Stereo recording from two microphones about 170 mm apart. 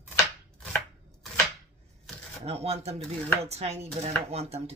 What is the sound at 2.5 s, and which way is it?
Speech, 35° right (ahead or behind).